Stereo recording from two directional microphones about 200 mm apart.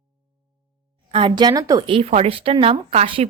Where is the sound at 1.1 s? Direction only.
20° right (ahead or behind).